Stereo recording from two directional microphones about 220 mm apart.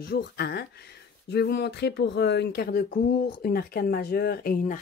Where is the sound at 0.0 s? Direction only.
45° left (ahead or behind).